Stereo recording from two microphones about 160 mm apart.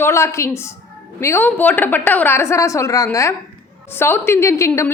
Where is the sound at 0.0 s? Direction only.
15° left (ahead or behind).